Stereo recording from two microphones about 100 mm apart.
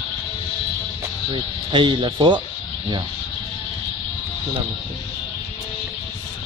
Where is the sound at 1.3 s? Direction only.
55° right (ahead or behind).